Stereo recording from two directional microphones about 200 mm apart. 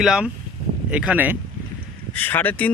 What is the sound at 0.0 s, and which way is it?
Speech, 5° right (ahead or behind).